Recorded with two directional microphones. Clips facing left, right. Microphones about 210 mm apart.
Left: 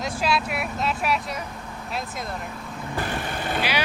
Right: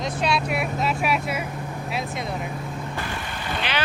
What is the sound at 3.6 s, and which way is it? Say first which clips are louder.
Speech: left 1 dB; 10° left (ahead or behind).